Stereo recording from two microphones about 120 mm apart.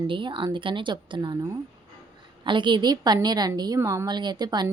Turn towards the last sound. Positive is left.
turn(degrees=-35)  # may be behind; listen again after turning